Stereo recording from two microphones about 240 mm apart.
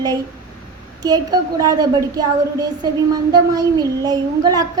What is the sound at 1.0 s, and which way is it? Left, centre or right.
Child singing, centre.